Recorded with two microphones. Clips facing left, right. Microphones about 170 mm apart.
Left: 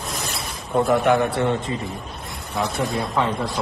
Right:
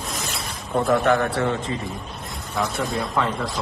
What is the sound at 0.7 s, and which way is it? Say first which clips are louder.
Speech: left 1 dB; 15° left (ahead or behind).